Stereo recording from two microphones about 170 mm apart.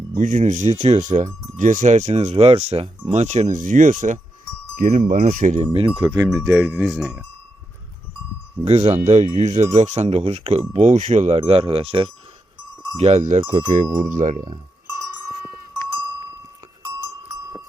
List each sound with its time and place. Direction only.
0.2 s speech: 50° right (ahead or behind)
5.6 s speech: 30° right (ahead or behind)
5.9 s speech: 5° right (ahead or behind)
8.6 s speech: 40° right (ahead or behind)
16.8 s goat: 15° right (ahead or behind)